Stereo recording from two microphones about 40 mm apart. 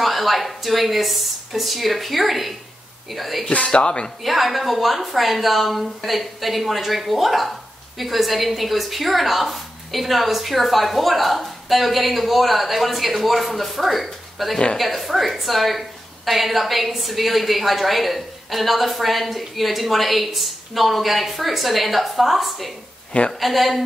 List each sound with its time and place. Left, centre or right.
0.0 s a woman's voice: centre
3.5 s speech: left
4.2 s a woman's voice: centre